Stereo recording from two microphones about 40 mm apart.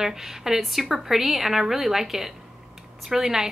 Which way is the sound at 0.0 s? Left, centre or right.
Centre.